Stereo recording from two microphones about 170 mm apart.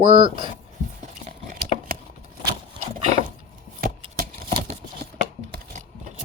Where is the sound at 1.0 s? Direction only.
55° right (ahead or behind).